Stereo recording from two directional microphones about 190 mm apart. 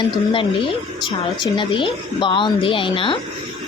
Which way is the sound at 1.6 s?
25° left (ahead or behind).